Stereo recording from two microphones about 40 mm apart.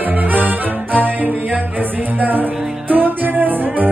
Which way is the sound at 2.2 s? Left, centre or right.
Right.